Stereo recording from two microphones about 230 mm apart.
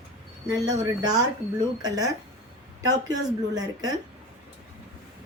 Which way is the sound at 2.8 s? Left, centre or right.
Centre.